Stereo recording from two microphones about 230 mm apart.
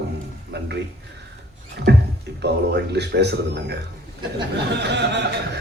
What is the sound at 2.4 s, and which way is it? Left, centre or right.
Speech, right.